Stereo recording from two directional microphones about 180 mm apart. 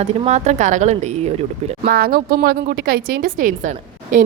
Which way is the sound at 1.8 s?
55° right (ahead or behind).